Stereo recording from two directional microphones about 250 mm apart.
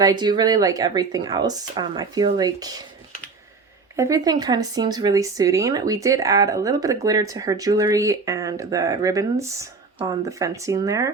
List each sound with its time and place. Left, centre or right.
0.0 s speech: centre
3.9 s speech: centre